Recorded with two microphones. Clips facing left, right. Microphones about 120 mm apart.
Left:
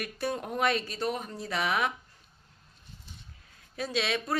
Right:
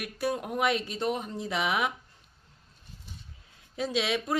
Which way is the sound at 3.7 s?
15° right (ahead or behind).